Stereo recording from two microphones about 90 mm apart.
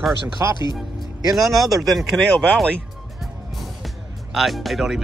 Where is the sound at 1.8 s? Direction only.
Centre (ahead or behind).